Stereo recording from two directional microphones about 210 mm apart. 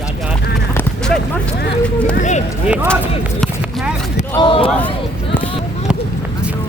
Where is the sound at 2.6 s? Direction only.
5° right (ahead or behind).